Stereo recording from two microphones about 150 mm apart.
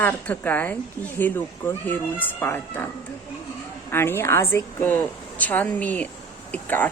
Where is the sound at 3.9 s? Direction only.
15° left (ahead or behind).